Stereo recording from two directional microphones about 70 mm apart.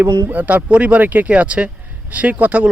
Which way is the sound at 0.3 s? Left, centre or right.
Right.